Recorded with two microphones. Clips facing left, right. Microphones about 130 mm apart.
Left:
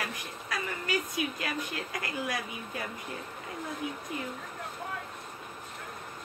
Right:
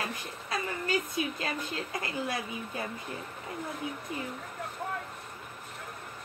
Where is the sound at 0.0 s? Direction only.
25° right (ahead or behind).